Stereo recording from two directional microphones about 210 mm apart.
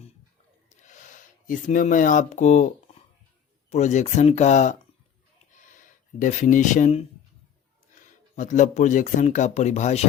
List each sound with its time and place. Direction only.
0.8 s speech: 35° left (ahead or behind)
5.5 s a sound: 35° left (ahead or behind)
7.9 s speech: 35° left (ahead or behind)